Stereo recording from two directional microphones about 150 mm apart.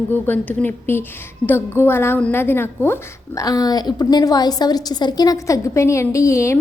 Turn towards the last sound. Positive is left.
turn(degrees=20)  # may be behind; listen again after turning